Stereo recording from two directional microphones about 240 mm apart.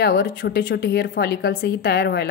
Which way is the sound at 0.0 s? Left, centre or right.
Left.